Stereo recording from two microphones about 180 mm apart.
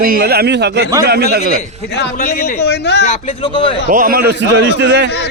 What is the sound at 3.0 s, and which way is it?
Speech, 30° left (ahead or behind).